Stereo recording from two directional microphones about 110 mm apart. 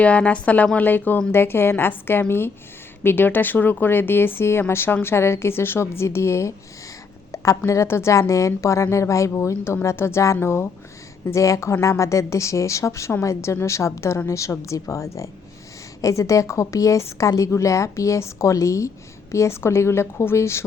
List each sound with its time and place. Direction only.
0.0 s a woman's voice: 10° left (ahead or behind)